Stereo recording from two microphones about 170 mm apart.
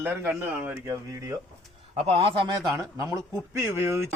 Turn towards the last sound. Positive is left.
turn(degrees=-15)  # may be behind; listen again after turning